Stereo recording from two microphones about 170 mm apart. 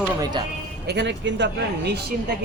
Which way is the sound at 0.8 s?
90° right.